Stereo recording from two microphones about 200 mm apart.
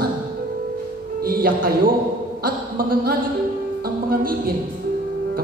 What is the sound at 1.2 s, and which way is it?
Music, 45° right (ahead or behind).